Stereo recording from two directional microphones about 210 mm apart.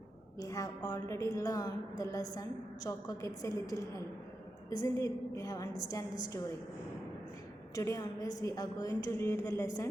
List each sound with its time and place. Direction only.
0.3 s a woman's voice: 15° left (ahead or behind)
7.8 s a woman's voice: 15° left (ahead or behind)